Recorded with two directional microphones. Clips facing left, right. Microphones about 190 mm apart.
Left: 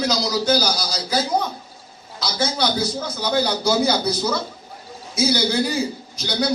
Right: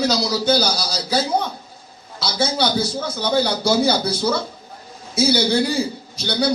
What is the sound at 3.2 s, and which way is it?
Speech, 30° right (ahead or behind).